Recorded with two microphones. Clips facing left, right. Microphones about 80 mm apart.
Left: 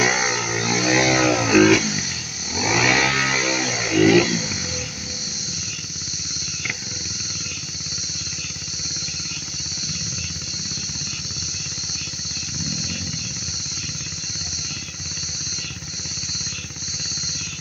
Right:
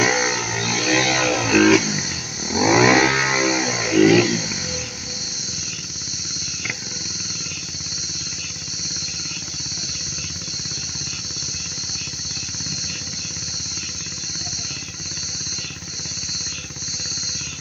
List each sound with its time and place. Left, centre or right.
0.0 s music: centre
2.5 s vehicle: right; by 4.6 s centre